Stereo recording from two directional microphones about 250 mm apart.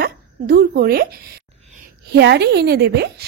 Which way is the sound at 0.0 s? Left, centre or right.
Right.